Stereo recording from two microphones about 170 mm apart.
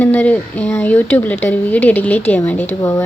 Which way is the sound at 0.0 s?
10° left (ahead or behind).